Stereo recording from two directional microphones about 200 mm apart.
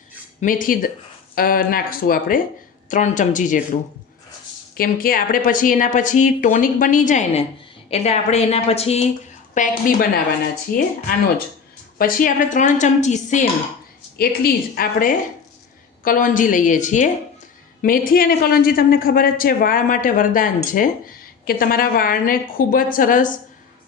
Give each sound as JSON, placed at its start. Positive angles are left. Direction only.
{"t": 0.3, "sound": "a man's voice", "side_deg": 45}
{"t": 4.8, "sound": "speech", "side_deg": 45}
{"t": 9.6, "sound": "a man's voice", "side_deg": 45}
{"t": 14.2, "sound": "a man's voice", "side_deg": 50}